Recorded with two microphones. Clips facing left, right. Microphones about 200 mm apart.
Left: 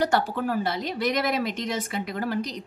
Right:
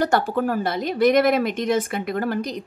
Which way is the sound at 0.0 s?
50° right (ahead or behind).